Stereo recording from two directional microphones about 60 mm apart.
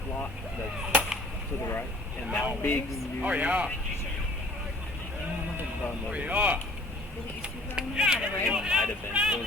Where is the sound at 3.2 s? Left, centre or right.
Right.